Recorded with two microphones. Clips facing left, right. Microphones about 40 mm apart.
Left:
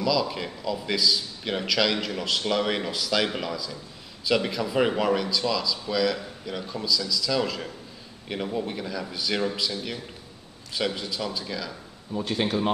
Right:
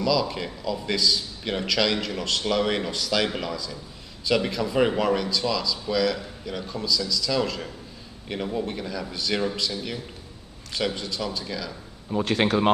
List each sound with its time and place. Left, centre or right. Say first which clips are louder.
0.0 s a man's voice: right 1 dB; centre
12.1 s a man's voice: right 4 dB; right